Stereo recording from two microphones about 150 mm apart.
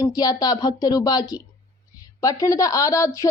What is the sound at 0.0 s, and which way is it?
Speech, 25° left (ahead or behind).